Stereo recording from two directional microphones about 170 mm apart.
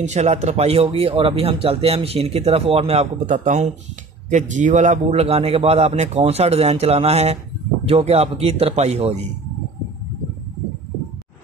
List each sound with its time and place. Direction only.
0.0 s speech: 40° right (ahead or behind)
3.3 s speech: 45° right (ahead or behind)